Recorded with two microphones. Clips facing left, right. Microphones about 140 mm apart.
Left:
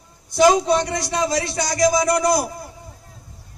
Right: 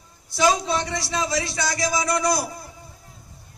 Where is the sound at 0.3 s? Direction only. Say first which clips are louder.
Left 6 dB; 45° left (ahead or behind).